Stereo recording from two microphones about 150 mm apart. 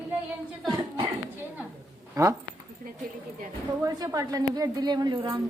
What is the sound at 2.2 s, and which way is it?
Speech, 20° right (ahead or behind).